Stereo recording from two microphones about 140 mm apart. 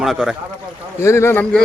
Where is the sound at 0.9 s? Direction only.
20° left (ahead or behind).